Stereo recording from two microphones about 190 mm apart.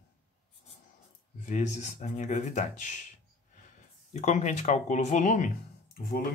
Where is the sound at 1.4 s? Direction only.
40° left (ahead or behind).